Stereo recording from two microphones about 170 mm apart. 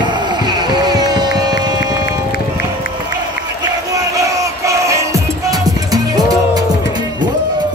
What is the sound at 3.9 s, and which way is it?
Music, 20° right (ahead or behind).